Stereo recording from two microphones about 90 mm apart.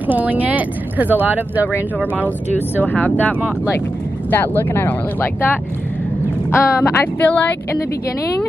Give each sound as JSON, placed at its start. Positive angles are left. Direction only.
{"t": 0.1, "sound": "speech", "side_deg": -20}
{"t": 2.8, "sound": "speech", "side_deg": 20}